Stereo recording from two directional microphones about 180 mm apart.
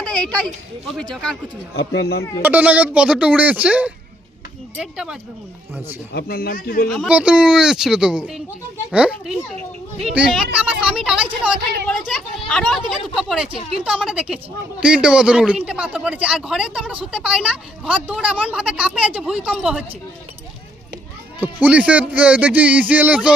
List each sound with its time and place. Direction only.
0.0 s children playing: 5° left (ahead or behind)
0.9 s speech: 5° left (ahead or behind)
1.7 s speech: 65° left (ahead or behind)
2.4 s speech: 10° right (ahead or behind)
6.1 s speech: 55° left (ahead or behind)
6.8 s speech: centre (ahead or behind)
21.4 s speech: 10° right (ahead or behind)